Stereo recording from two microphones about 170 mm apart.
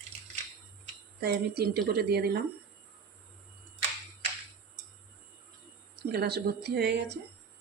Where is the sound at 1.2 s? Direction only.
65° right (ahead or behind).